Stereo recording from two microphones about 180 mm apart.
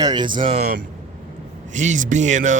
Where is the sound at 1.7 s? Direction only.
40° right (ahead or behind).